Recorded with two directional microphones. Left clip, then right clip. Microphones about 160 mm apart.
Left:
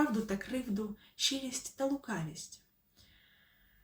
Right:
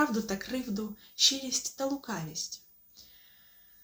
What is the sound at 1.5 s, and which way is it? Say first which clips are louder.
Speech: right 9 dB; 45° left (ahead or behind).